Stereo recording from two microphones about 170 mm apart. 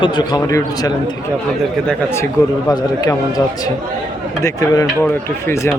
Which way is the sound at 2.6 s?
25° left (ahead or behind).